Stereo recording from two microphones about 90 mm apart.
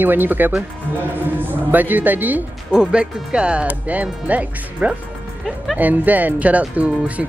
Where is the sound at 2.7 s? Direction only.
10° right (ahead or behind).